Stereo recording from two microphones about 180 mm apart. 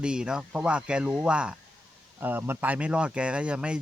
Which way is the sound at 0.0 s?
5° right (ahead or behind).